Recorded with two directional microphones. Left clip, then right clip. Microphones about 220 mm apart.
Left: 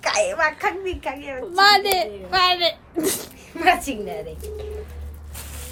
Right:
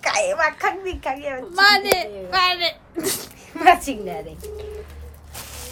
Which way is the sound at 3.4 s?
15° right (ahead or behind).